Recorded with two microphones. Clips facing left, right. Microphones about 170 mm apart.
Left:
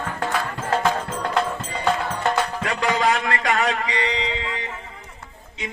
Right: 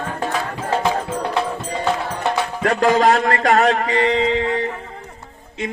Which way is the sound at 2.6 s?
45° right (ahead or behind).